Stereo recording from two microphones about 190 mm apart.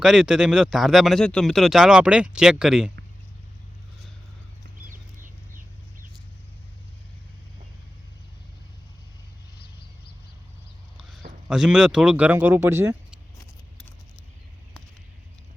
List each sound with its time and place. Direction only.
0.0 s speech: centre (ahead or behind)
4.9 s chicken: 45° right (ahead or behind)
10.9 s a sound: centre (ahead or behind)
11.4 s speech: 5° right (ahead or behind)